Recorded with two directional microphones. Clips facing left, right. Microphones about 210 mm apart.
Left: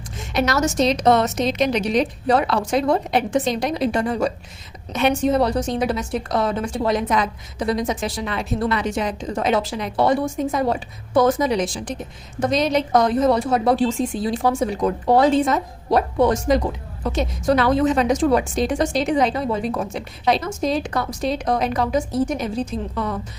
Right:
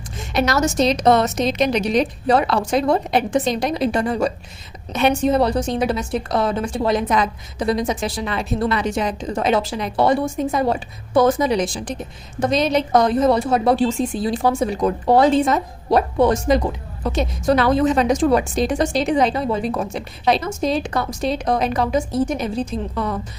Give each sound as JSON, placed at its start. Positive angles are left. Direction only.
{"t": 0.3, "sound": "a woman's voice", "side_deg": -35}